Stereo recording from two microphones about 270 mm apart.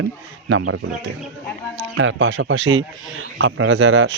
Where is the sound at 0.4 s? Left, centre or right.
Right.